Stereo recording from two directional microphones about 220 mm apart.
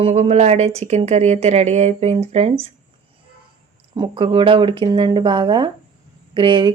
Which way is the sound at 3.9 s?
20° right (ahead or behind).